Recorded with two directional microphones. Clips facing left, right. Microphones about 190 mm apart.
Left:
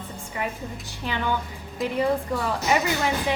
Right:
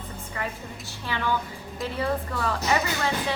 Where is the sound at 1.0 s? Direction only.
15° left (ahead or behind).